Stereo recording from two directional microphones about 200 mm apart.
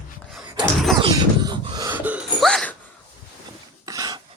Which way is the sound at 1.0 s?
25° right (ahead or behind).